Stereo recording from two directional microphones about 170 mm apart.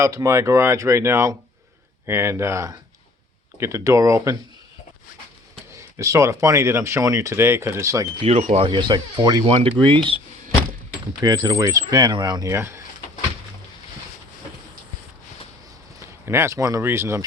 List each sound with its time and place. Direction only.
0.0 s speech: 15° right (ahead or behind)
6.0 s speech: 20° right (ahead or behind)
8.2 s speech: 40° right (ahead or behind); by 9.4 s 25° right (ahead or behind)
9.5 s speech: 35° right (ahead or behind)
11.2 s speech: 25° right (ahead or behind)
16.2 s speech: 15° right (ahead or behind)